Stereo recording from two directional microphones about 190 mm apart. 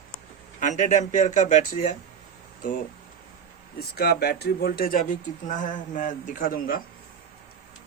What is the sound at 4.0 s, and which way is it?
Speech, 55° left (ahead or behind).